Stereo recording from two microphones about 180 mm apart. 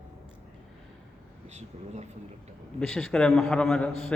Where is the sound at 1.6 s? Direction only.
40° right (ahead or behind).